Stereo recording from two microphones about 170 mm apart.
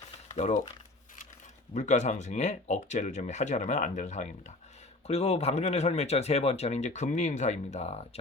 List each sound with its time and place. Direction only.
0.3 s speech: 40° left (ahead or behind)
1.7 s speech: 45° left (ahead or behind)